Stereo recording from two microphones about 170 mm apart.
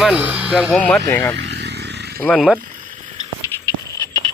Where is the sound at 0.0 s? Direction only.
5° right (ahead or behind).